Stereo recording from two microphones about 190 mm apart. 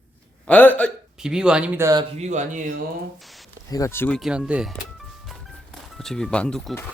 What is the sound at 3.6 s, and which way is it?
Speech, 20° left (ahead or behind).